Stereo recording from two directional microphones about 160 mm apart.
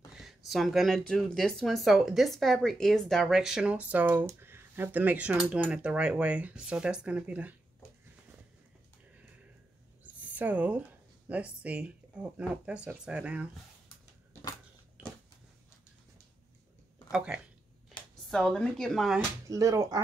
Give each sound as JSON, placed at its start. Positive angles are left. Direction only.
{"t": 0.1, "sound": "speech", "side_deg": 0}
{"t": 10.3, "sound": "speech", "side_deg": -10}
{"t": 18.3, "sound": "speech", "side_deg": 5}
{"t": 19.4, "sound": "speech", "side_deg": -20}